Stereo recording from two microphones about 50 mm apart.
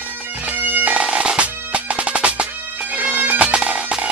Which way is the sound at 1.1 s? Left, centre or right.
Right.